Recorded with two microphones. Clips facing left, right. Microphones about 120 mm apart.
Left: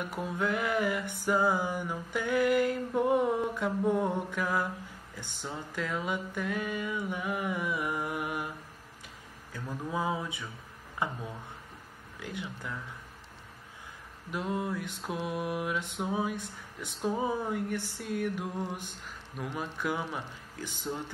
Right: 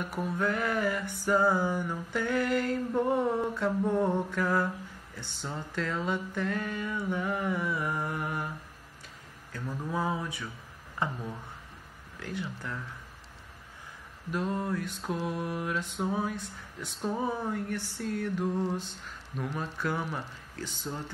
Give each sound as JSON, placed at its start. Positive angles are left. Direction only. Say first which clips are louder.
{"t": 0.0, "sound": "mantra", "louder": "right 1 dB", "side_deg": 15}
{"t": 9.5, "sound": "mantra", "louder": "right 1 dB", "side_deg": 15}
{"t": 12.2, "sound": "mantra", "louder": "right 2 dB", "side_deg": 15}
{"t": 14.3, "sound": "mantra", "louder": "right 2 dB", "side_deg": 10}